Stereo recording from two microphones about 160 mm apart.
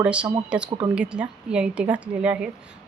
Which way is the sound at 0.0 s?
5° right (ahead or behind).